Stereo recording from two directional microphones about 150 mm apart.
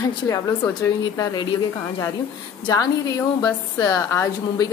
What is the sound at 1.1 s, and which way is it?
A woman's voice, 25° left (ahead or behind).